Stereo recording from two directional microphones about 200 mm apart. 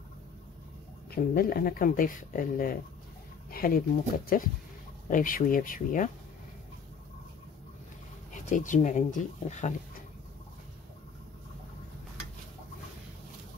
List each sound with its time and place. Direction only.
1.1 s speech: 50° left (ahead or behind)
8.3 s speech: 40° left (ahead or behind)